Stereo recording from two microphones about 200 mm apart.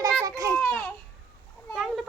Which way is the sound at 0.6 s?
5° left (ahead or behind).